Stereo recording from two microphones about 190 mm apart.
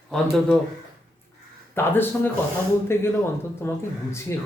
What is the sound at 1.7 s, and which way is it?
Speech, 10° left (ahead or behind).